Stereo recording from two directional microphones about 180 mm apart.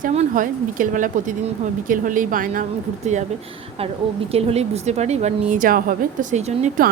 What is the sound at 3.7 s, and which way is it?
A woman's voice, 35° right (ahead or behind).